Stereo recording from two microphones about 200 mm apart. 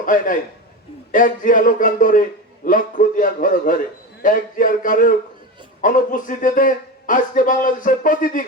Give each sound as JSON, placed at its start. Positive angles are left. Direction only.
{"t": 0.0, "sound": "a man's voice", "side_deg": 40}